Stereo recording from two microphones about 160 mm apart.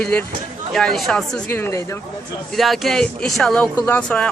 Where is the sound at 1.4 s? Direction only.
15° left (ahead or behind).